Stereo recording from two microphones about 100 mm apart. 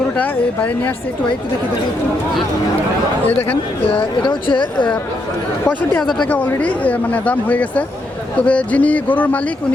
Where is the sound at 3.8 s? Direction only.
55° left (ahead or behind).